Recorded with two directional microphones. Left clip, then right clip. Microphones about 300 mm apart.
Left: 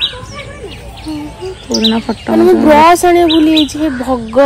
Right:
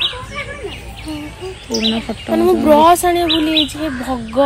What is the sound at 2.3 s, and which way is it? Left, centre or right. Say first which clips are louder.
Speech: left 4 dB; centre.